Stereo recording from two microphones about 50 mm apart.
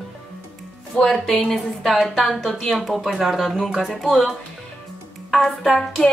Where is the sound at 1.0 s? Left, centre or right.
Centre.